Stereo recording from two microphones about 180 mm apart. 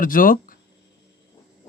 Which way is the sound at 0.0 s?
50° left (ahead or behind).